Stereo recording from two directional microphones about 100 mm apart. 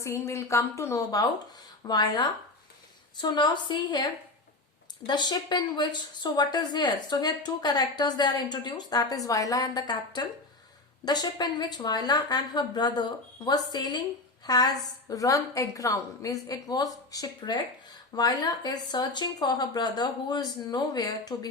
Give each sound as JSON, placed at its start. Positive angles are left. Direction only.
{"t": 0.0, "sound": "speech", "side_deg": 30}
{"t": 1.8, "sound": "a woman's voice", "side_deg": 45}
{"t": 5.0, "sound": "a woman's voice", "side_deg": 50}